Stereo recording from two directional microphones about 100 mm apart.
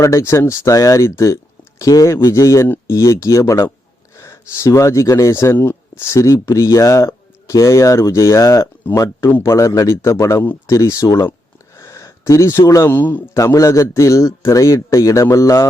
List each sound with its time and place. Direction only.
0.0 s speech: 30° left (ahead or behind)
13.0 s a man's voice: 20° left (ahead or behind)
13.3 s speech: 35° left (ahead or behind)